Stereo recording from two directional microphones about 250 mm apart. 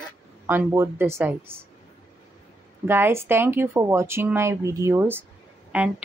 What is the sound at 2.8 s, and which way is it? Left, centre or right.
Speech, centre.